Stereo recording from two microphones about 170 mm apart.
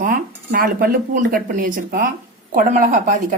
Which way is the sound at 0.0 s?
55° right (ahead or behind).